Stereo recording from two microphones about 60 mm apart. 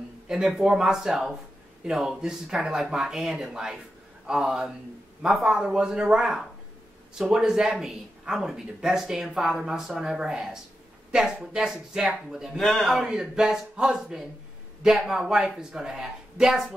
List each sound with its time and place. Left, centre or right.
0.3 s a woman's voice: centre
12.5 s speech: centre